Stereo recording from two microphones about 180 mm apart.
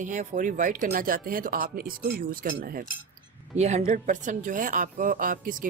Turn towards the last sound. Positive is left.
turn(degrees=-50)  # may be behind; listen again after turning